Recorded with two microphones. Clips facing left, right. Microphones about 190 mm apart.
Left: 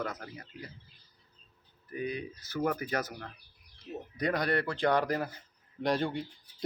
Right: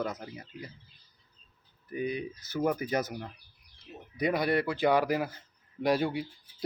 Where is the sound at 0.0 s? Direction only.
15° right (ahead or behind).